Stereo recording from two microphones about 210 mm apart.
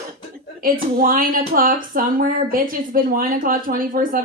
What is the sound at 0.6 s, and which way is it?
Speech, 40° right (ahead or behind).